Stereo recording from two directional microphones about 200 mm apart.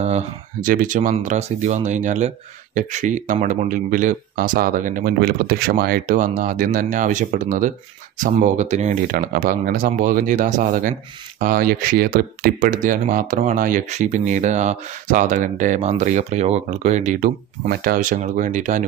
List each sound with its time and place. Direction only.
0.0 s speech: 40° right (ahead or behind)